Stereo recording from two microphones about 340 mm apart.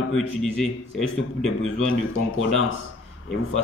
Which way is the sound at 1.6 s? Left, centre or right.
Left.